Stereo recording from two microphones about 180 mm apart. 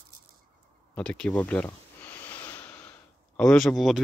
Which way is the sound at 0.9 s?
5° left (ahead or behind).